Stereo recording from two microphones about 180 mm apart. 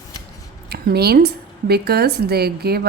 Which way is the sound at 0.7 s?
60° right (ahead or behind).